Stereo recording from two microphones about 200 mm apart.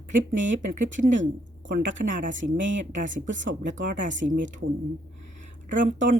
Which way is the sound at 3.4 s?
65° right (ahead or behind).